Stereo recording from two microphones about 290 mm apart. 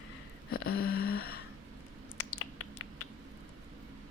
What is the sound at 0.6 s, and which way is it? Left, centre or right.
Speech, left.